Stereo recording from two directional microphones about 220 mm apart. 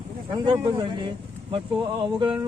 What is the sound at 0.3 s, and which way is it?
A man's voice, 20° right (ahead or behind).